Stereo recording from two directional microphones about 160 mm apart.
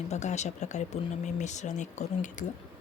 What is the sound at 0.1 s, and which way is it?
Speech, 45° left (ahead or behind).